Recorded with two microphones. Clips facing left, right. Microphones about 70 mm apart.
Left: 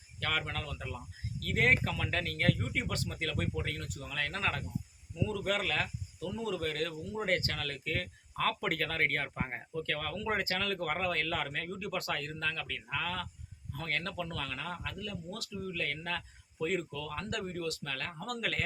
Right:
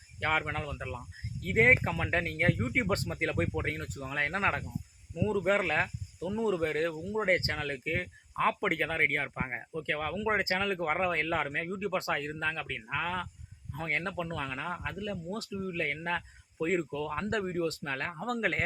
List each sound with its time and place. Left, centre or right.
0.2 s speech: right